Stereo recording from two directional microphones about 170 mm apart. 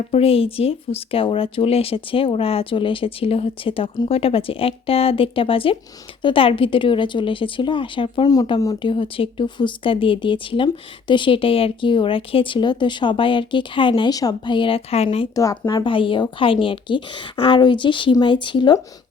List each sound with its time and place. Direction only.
0.1 s a woman's voice: 35° left (ahead or behind)
15.4 s a woman's voice: 25° left (ahead or behind)